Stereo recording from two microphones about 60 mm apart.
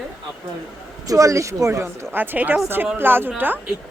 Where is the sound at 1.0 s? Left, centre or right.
Right.